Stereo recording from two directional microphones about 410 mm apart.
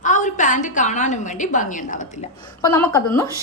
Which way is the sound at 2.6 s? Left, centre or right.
Centre.